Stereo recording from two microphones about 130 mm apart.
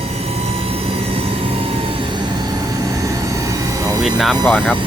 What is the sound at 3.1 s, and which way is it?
Vehicle, 25° right (ahead or behind).